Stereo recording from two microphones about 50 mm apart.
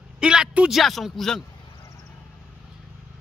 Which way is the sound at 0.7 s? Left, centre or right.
Centre.